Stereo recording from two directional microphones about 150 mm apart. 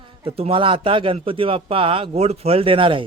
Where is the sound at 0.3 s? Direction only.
40° right (ahead or behind).